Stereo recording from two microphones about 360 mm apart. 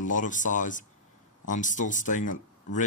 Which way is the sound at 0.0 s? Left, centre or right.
Left.